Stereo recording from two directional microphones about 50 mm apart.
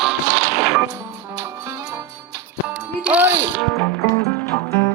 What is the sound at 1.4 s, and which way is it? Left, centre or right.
Music, right.